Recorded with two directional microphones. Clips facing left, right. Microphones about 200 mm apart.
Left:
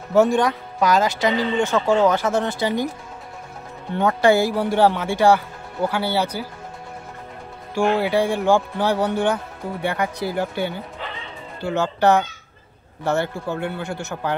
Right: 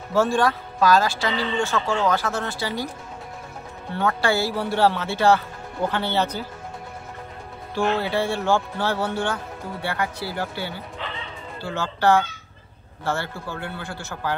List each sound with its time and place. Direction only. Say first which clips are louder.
0.1 s speech: left 4 dB; 20° left (ahead or behind)
3.9 s speech: left 6 dB; 20° left (ahead or behind)
7.7 s speech: left 4 dB; 15° left (ahead or behind)